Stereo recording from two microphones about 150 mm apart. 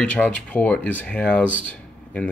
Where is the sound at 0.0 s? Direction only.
5° left (ahead or behind).